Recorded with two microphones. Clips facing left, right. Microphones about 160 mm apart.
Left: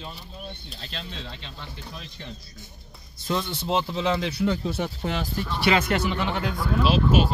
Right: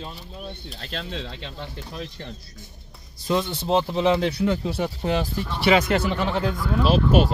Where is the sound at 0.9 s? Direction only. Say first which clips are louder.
Right 6 dB; 60° right (ahead or behind).